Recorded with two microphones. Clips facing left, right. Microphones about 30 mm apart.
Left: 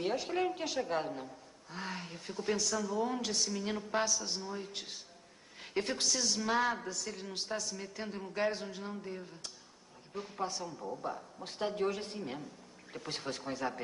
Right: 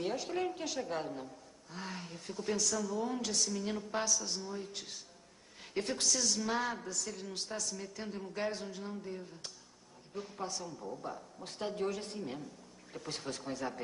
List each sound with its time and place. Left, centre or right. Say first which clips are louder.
0.0 s a woman's voice: left 2 dB; centre